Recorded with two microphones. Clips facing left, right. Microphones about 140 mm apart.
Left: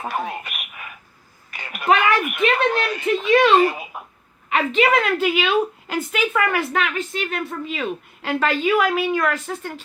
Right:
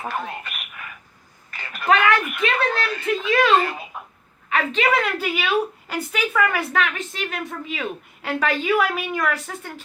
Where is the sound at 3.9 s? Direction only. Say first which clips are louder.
Left 1 dB; 10° left (ahead or behind).